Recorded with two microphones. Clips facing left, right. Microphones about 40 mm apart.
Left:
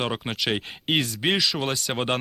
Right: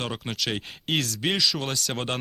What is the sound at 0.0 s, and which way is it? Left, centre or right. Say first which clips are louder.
Speech: left 3 dB; centre.